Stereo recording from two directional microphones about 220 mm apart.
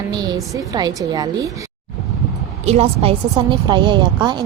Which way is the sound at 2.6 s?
25° right (ahead or behind).